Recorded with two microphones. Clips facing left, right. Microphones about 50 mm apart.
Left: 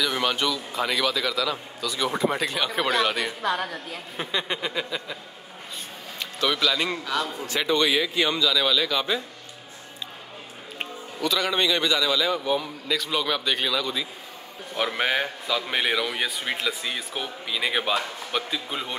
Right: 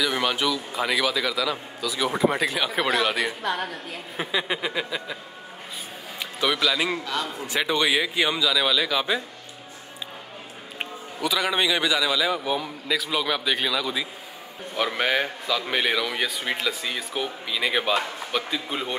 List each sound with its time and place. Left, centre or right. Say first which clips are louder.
0.0 s a man's voice: right 1 dB; centre
7.4 s a man's voice: even; centre
10.8 s a man's voice: even; centre